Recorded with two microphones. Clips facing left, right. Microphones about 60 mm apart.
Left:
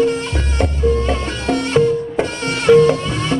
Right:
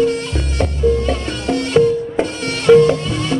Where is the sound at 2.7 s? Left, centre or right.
Centre.